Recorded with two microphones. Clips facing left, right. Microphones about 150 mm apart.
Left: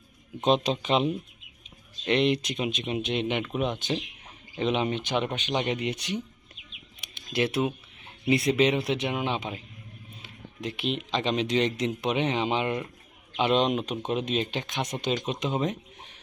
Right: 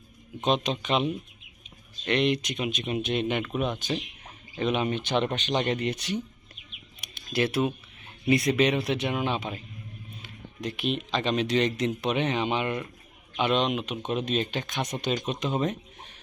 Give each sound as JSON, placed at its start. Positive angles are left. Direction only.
{"t": 0.4, "sound": "speech", "side_deg": 30}
{"t": 5.1, "sound": "speech", "side_deg": 10}
{"t": 5.9, "sound": "speech", "side_deg": 20}
{"t": 7.1, "sound": "typing", "side_deg": 20}
{"t": 8.3, "sound": "speech", "side_deg": 25}
{"t": 14.1, "sound": "speech", "side_deg": 20}